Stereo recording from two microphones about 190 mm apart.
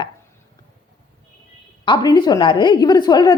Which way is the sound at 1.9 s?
20° left (ahead or behind).